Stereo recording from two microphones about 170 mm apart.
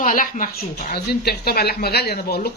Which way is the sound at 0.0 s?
55° left (ahead or behind).